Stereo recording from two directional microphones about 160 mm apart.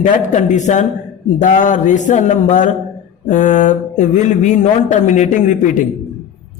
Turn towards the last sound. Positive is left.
turn(degrees=50)  # may be behind; listen again after turning